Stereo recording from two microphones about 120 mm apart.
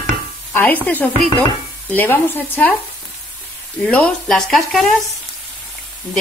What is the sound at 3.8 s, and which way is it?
Speech, 10° left (ahead or behind).